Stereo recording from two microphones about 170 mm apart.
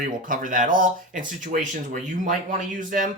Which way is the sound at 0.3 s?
50° right (ahead or behind).